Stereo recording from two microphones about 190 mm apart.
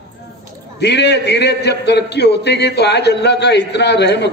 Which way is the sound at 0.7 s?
65° left (ahead or behind).